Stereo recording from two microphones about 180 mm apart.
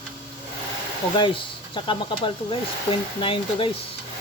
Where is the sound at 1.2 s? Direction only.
25° left (ahead or behind).